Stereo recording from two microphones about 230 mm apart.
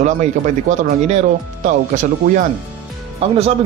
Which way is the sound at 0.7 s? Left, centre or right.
Right.